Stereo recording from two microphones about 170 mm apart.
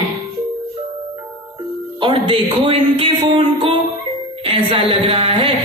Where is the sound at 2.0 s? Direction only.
30° right (ahead or behind).